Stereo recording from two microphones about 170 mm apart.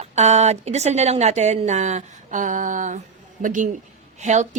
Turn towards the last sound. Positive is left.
turn(degrees=-45)  # may be behind; listen again after turning